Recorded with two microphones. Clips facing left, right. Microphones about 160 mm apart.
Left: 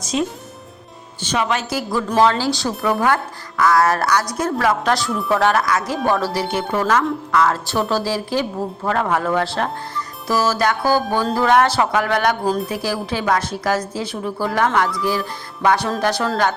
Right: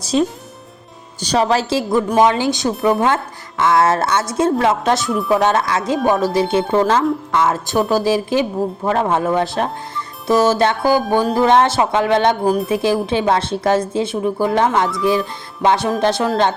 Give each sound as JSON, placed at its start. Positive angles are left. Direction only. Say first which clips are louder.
{"t": 0.0, "sound": "a man's voice", "louder": "right 5 dB", "side_deg": -35}
{"t": 1.9, "sound": "speech", "louder": "right 2 dB", "side_deg": -20}